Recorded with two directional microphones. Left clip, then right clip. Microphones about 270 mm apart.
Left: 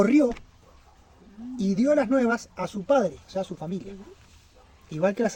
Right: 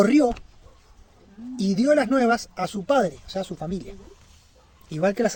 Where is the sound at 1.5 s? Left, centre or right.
Right.